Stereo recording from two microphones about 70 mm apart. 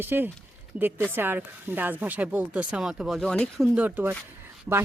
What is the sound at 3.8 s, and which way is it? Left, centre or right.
Speech, right.